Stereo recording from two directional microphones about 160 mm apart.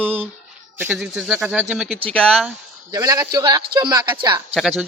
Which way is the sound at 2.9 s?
20° right (ahead or behind).